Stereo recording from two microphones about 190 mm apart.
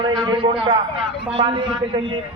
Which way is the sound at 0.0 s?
25° right (ahead or behind).